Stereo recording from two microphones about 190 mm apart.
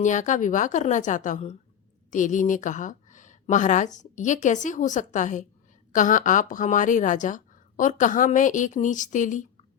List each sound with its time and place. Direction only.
0.0 s a woman's voice: 40° left (ahead or behind)